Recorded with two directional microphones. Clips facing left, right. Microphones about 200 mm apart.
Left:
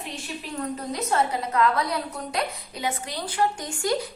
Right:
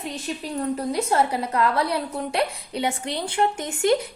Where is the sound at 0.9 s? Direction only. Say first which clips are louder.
Right 1 dB; 30° right (ahead or behind).